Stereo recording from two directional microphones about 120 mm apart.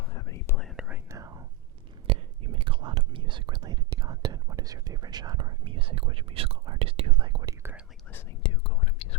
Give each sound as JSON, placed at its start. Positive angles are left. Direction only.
{"t": 0.1, "sound": "whispering", "side_deg": 30}
{"t": 1.0, "sound": "whispering", "side_deg": -25}
{"t": 2.0, "sound": "whispering", "side_deg": -45}
{"t": 7.4, "sound": "whispering", "side_deg": -20}
{"t": 8.4, "sound": "whispering", "side_deg": 50}